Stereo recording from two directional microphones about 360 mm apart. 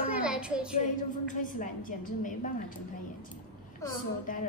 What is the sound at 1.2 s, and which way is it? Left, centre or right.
A woman's voice, left.